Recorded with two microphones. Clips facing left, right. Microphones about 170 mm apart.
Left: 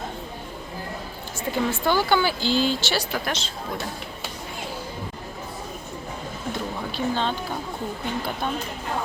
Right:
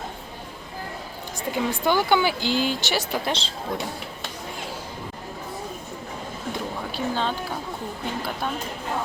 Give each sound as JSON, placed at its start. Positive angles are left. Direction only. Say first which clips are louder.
{"t": 1.5, "sound": "speech", "louder": "even", "side_deg": -15}
{"t": 6.9, "sound": "speech", "louder": "left 1 dB", "side_deg": -5}